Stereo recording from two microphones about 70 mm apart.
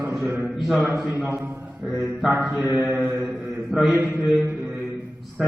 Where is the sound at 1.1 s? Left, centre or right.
Right.